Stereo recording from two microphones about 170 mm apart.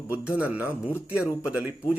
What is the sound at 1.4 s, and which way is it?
Speech, 5° right (ahead or behind).